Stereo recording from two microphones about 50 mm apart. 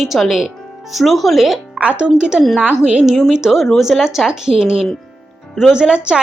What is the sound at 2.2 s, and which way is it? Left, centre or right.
A woman's voice, centre.